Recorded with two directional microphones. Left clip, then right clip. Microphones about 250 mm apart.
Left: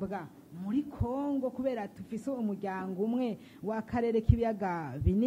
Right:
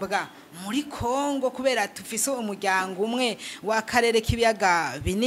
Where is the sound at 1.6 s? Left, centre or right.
Centre.